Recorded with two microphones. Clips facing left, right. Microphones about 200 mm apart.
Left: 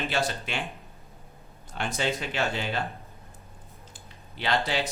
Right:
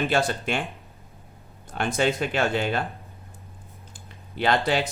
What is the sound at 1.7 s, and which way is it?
Speech, 55° right (ahead or behind).